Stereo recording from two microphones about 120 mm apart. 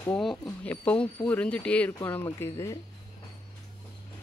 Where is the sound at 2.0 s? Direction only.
20° left (ahead or behind).